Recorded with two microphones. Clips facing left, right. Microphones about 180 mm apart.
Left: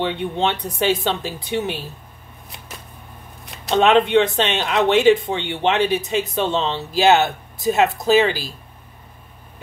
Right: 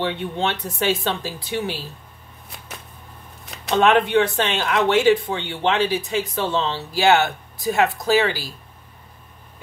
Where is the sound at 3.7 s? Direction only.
20° left (ahead or behind).